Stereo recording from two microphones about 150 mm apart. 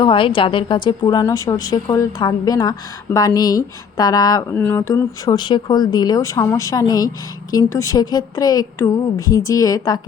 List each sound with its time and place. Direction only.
0.0 s a woman's voice: 35° left (ahead or behind)